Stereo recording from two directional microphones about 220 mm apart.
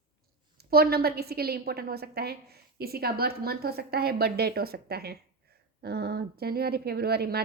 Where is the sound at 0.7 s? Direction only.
45° right (ahead or behind).